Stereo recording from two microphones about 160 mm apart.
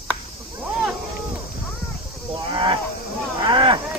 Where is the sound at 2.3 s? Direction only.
30° right (ahead or behind).